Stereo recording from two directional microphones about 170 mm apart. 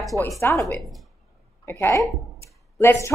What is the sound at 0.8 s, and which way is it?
Speech, centre (ahead or behind).